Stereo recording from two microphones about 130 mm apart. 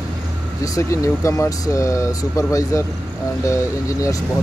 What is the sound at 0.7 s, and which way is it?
Speech, 25° left (ahead or behind).